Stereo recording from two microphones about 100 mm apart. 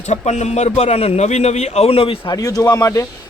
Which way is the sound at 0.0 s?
90° left.